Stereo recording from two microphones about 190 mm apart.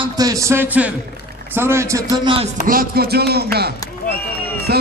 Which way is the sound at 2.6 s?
50° right (ahead or behind).